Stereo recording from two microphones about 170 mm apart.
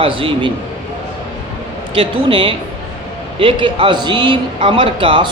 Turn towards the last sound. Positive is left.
turn(degrees=-30)  # may be behind; listen again after turning